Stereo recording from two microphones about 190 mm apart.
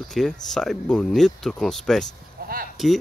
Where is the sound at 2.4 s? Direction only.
55° right (ahead or behind).